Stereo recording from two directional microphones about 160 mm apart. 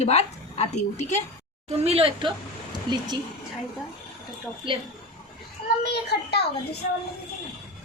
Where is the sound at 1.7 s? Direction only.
40° right (ahead or behind).